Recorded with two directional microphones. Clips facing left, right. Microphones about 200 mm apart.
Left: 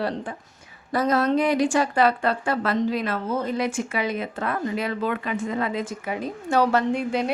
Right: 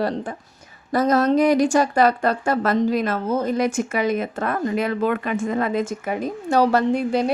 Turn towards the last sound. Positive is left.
turn(degrees=-35)  # may be behind; listen again after turning